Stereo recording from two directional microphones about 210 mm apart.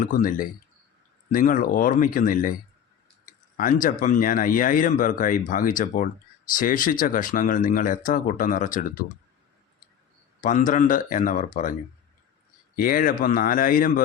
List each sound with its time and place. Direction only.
0.0 s speech: 40° left (ahead or behind)
10.4 s speech: 40° left (ahead or behind)